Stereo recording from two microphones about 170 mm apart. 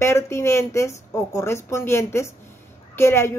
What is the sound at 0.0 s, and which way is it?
Speech, 15° left (ahead or behind).